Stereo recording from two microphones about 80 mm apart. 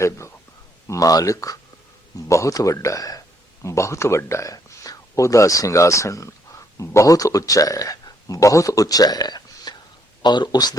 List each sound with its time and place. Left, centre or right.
0.9 s a man's voice: left